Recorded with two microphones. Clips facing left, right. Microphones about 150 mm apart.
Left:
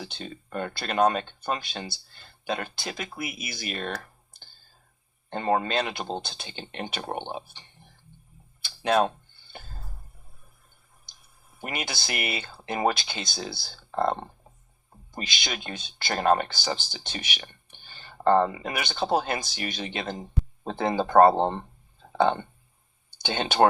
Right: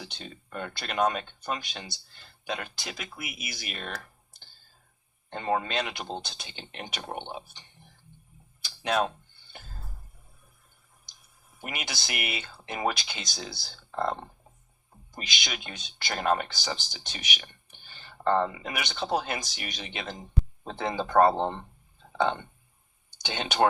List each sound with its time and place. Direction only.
0.0 s speech: 35° left (ahead or behind)
3.2 s speech: 30° left (ahead or behind)
5.3 s speech: 40° left (ahead or behind)
8.6 s a sound: 30° left (ahead or behind)
11.6 s speech: 30° left (ahead or behind)
15.2 s speech: 30° left (ahead or behind)
17.7 s a sound: 30° left (ahead or behind)
18.7 s speech: 30° left (ahead or behind)
21.0 s speech: 50° left (ahead or behind)
21.3 s speech: 35° left (ahead or behind)
23.1 s speech: 30° left (ahead or behind)